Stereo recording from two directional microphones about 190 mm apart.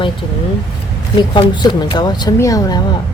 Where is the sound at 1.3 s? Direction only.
25° left (ahead or behind).